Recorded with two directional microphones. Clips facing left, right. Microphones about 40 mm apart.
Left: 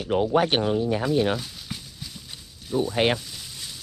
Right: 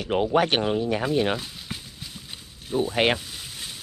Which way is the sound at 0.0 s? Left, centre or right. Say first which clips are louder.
Even; right.